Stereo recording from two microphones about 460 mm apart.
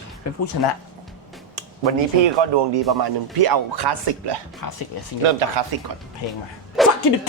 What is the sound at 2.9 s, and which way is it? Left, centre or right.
Speech, right.